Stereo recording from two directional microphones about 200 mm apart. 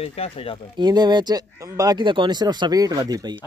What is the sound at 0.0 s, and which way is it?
Speech, 30° left (ahead or behind).